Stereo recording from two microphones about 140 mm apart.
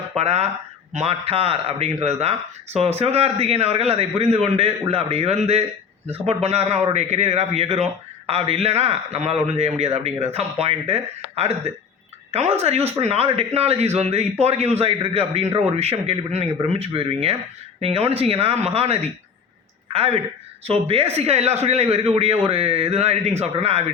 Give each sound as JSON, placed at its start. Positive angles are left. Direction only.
{"t": 0.2, "sound": "a man's voice", "side_deg": -50}